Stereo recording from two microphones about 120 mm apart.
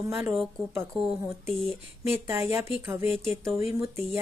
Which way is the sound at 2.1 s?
20° right (ahead or behind).